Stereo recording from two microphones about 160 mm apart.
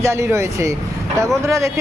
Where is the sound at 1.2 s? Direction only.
20° right (ahead or behind).